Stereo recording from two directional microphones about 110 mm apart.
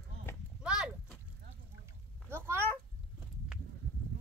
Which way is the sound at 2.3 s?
20° right (ahead or behind).